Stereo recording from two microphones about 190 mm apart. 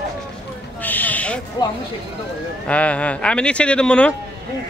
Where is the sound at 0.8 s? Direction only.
10° left (ahead or behind).